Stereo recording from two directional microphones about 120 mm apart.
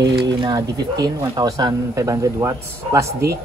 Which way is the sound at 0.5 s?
30° right (ahead or behind).